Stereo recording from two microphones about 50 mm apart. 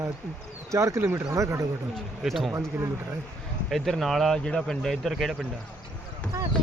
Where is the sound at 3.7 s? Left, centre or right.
Centre.